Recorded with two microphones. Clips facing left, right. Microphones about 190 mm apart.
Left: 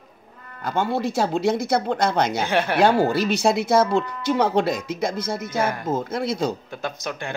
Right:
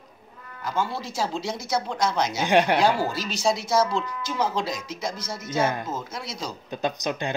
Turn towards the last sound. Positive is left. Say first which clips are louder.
# right 3 dB
turn(degrees=-20)  # may be behind; listen again after turning